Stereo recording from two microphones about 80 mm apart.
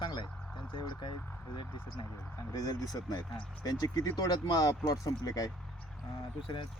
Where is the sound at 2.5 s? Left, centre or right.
Left.